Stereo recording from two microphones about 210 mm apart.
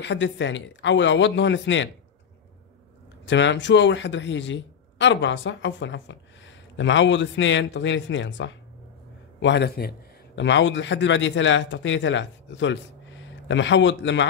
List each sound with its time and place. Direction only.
0.0 s a man's voice: 60° left (ahead or behind)
3.3 s a man's voice: 60° left (ahead or behind)